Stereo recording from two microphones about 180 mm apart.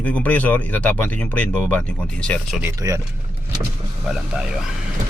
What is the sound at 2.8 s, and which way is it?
Speech, 20° right (ahead or behind).